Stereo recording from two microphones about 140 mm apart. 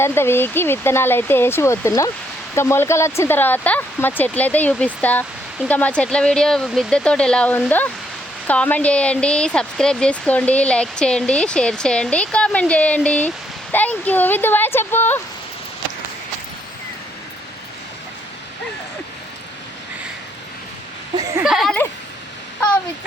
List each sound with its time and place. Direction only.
0.0 s speech: 15° left (ahead or behind)
21.2 s a sound: 25° right (ahead or behind)
21.4 s speech: centre (ahead or behind)